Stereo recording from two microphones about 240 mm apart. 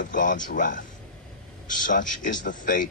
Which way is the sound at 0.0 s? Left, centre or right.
Left.